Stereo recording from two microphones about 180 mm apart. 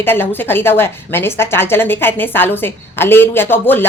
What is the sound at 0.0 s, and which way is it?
A woman's voice, 10° left (ahead or behind).